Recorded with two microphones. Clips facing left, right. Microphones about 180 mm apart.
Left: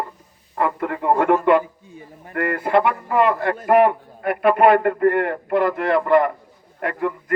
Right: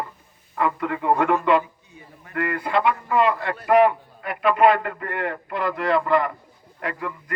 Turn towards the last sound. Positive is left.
turn(degrees=50)  # may be behind; listen again after turning